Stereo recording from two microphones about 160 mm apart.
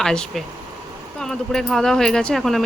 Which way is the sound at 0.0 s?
5° left (ahead or behind).